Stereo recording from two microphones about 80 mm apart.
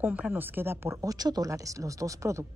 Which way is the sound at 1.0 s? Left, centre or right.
Right.